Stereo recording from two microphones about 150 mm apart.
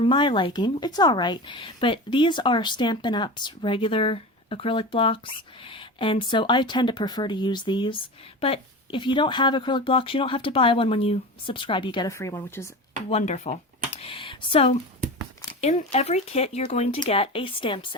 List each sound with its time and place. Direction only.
0.0 s a woman's voice: 35° left (ahead or behind)
12.1 s speech: 20° left (ahead or behind)
13.1 s a woman's voice: 45° left (ahead or behind)